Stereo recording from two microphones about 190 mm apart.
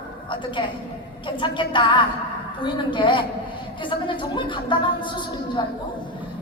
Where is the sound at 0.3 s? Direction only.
25° left (ahead or behind).